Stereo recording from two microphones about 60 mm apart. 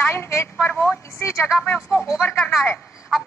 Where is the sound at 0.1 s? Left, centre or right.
Left.